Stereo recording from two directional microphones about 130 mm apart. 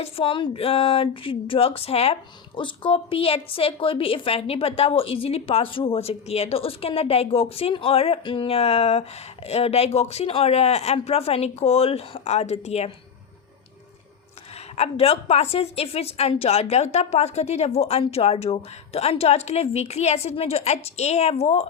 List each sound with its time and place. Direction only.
0.0 s a woman's voice: 45° left (ahead or behind)
2.6 s a woman's voice: 40° left (ahead or behind); by 12.9 s 55° left (ahead or behind)
14.8 s a woman's voice: 50° left (ahead or behind)